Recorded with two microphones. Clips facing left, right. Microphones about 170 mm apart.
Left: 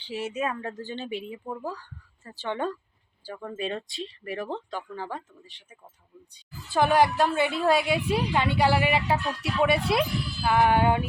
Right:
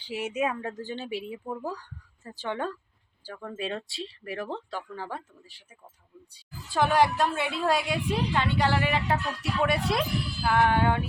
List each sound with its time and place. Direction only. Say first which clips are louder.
0.0 s a woman's voice: right 1 dB; 10° right (ahead or behind); by 11.0 s 15° left (ahead or behind)